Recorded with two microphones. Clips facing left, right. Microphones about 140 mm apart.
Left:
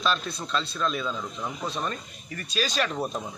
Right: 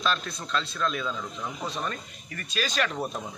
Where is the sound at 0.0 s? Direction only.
30° left (ahead or behind).